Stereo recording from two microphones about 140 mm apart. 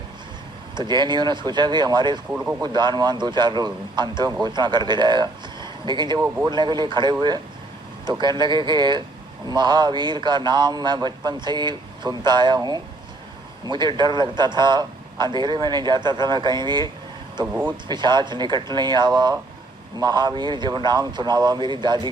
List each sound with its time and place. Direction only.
0.8 s a man's voice: 30° right (ahead or behind)
2.3 s speech: 10° right (ahead or behind)
2.6 s a man's voice: 30° right (ahead or behind)
17.4 s speech: 10° right (ahead or behind)
17.8 s a man's voice: 30° right (ahead or behind)